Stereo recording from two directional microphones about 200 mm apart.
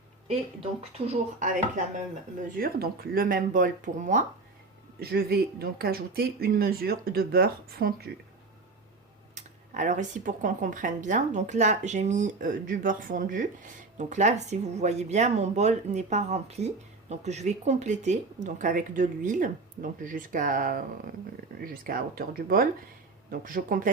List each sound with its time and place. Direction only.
0.3 s speech: 30° right (ahead or behind)
4.9 s speech: 50° right (ahead or behind)
9.3 s speech: 35° right (ahead or behind)